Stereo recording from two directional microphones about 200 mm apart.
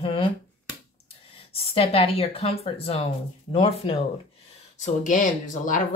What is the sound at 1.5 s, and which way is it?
Speech, 30° left (ahead or behind).